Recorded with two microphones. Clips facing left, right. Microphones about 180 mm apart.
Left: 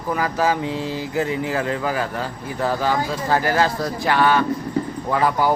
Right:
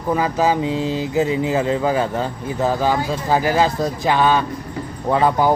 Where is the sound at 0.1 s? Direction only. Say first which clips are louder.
Right 3 dB; 20° right (ahead or behind).